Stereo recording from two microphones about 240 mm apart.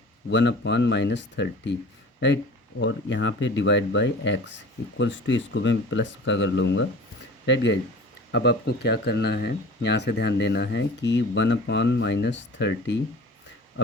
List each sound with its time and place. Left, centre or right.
0.3 s speech: left